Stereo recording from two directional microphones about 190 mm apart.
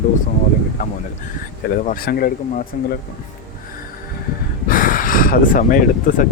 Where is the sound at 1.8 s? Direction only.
50° left (ahead or behind).